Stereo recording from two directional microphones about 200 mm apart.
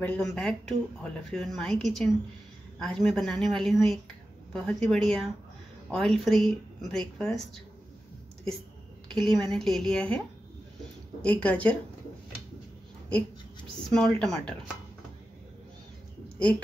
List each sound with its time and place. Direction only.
0.0 s speech: 5° left (ahead or behind)
9.1 s speech: centre (ahead or behind)
11.2 s speech: 5° left (ahead or behind)
13.8 s speech: centre (ahead or behind)
16.3 s a woman's voice: 5° left (ahead or behind)